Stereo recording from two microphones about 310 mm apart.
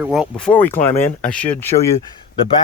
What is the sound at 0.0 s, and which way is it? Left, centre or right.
Speech, centre.